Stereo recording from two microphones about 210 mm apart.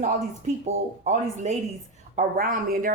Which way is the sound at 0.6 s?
35° right (ahead or behind).